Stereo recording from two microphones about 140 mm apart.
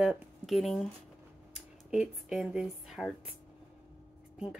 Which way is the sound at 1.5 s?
5° right (ahead or behind).